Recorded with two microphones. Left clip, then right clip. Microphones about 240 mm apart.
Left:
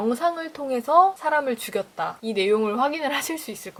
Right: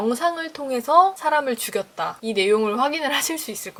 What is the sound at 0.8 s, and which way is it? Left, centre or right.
Speech, centre.